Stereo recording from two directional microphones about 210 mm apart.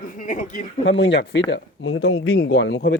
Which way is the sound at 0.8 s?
60° left (ahead or behind).